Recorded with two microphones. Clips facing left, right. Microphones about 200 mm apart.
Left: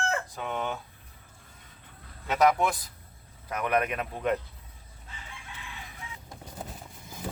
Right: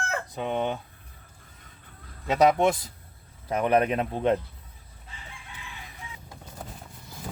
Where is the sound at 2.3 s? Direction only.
25° right (ahead or behind).